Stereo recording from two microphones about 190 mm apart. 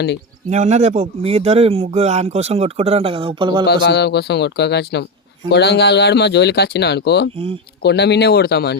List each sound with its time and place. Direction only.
0.5 s speech: 35° right (ahead or behind)
3.7 s speech: 60° left (ahead or behind)